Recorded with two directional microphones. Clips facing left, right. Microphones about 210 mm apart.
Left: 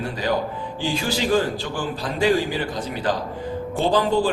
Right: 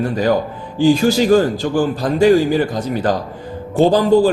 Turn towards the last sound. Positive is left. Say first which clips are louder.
# right 8 dB
turn(degrees=-40)  # may be behind; listen again after turning